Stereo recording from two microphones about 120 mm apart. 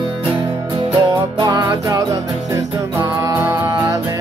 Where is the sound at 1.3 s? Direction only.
40° right (ahead or behind).